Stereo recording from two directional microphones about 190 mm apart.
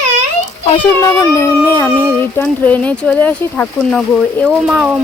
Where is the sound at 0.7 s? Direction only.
25° left (ahead or behind).